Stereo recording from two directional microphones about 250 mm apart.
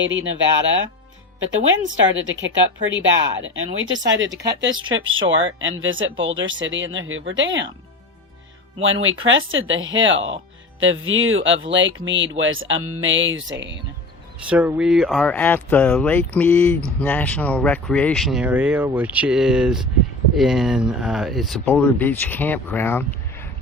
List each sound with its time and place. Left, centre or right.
0.0 s speech: right
2.1 s speech: right
8.8 s speech: right
14.4 s speech: centre